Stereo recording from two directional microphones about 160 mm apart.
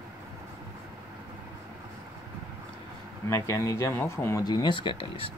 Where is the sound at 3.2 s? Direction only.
20° left (ahead or behind).